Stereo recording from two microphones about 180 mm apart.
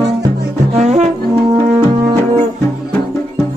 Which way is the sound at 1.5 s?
20° right (ahead or behind).